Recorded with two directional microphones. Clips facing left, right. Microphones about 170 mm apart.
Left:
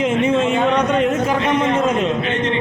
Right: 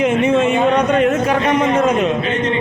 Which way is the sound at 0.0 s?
70° right (ahead or behind).